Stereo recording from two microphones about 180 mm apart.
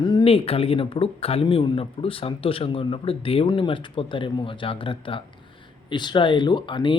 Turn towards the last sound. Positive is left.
turn(degrees=25)  # may be behind; listen again after turning